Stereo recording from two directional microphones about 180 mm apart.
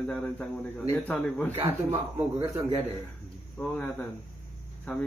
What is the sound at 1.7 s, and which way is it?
Speech, 15° right (ahead or behind).